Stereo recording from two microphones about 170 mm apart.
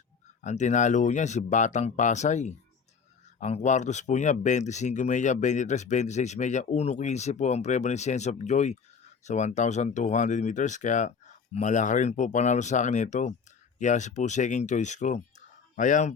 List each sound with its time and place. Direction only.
0.4 s speech: 45° left (ahead or behind)